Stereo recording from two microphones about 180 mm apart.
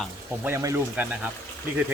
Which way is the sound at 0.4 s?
15° right (ahead or behind).